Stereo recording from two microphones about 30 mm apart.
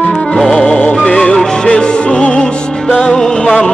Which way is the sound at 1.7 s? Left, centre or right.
Left.